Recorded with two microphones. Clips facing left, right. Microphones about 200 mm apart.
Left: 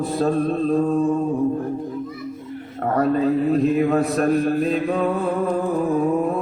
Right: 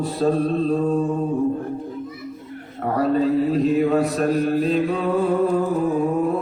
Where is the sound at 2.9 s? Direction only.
50° left (ahead or behind).